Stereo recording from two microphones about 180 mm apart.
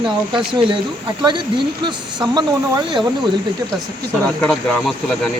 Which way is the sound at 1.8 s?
25° right (ahead or behind).